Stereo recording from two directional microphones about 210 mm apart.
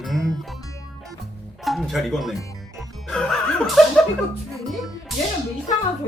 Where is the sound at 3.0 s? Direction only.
Centre (ahead or behind).